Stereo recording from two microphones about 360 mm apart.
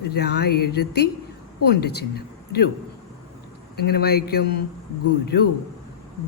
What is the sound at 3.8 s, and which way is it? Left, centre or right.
Speech, left.